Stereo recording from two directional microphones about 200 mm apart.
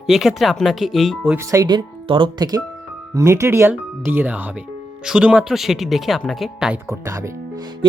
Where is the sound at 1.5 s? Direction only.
20° right (ahead or behind).